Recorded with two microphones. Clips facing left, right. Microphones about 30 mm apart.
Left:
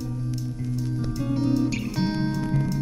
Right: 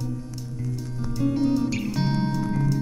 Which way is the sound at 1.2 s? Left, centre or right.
Centre.